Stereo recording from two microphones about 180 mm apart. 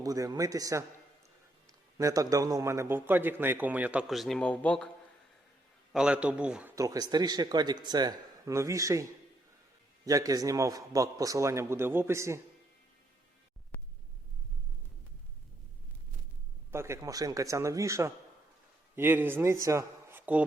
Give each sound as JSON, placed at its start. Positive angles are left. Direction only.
{"t": 0.0, "sound": "a man's voice", "side_deg": -20}
{"t": 2.0, "sound": "a man's voice", "side_deg": -20}
{"t": 5.9, "sound": "a man's voice", "side_deg": -5}
{"t": 10.1, "sound": "a man's voice", "side_deg": -20}
{"t": 16.7, "sound": "a man's voice", "side_deg": -15}
{"t": 19.6, "sound": "a sound", "side_deg": -15}